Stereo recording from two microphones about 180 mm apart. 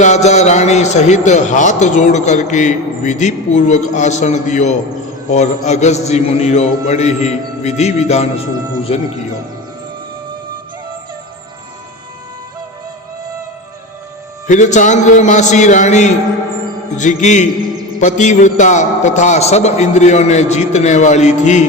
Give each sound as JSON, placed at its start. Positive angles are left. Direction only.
{"t": 0.0, "sound": "a man's voice", "side_deg": 40}
{"t": 14.4, "sound": "a man's voice", "side_deg": 45}
{"t": 17.0, "sound": "music", "side_deg": 45}
{"t": 18.0, "sound": "a man's voice", "side_deg": 40}